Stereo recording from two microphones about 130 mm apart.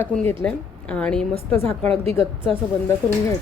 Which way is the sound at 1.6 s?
50° right (ahead or behind).